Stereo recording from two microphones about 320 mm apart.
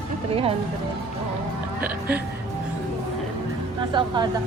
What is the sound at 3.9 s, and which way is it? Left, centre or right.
Speech, centre.